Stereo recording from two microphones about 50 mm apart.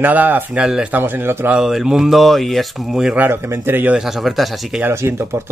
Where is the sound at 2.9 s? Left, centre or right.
Centre.